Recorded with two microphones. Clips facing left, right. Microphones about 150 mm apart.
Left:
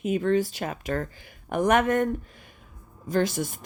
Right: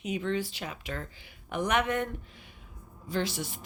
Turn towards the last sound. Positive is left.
turn(degrees=45)  # may be behind; listen again after turning